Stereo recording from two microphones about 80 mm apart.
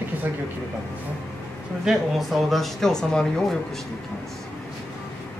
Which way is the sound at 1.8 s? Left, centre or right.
Centre.